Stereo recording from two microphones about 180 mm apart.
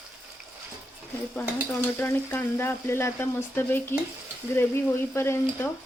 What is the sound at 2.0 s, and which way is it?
Speech, 10° left (ahead or behind).